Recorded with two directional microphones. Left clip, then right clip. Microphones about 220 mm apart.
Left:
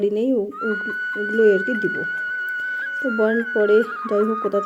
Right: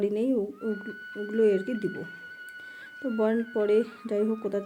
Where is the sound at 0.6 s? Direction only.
40° left (ahead or behind).